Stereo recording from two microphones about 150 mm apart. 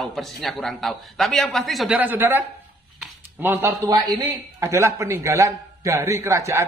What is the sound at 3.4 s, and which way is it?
Speech, 15° right (ahead or behind).